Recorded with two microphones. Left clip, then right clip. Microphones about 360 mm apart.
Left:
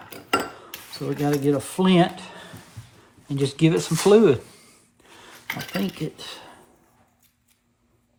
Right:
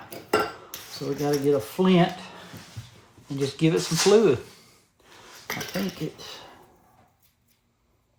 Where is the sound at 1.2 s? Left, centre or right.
Left.